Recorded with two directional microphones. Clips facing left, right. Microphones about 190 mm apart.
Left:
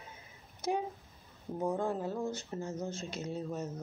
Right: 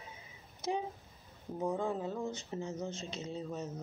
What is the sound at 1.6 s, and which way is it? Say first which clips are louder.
Speech: left 1 dB; 5° left (ahead or behind).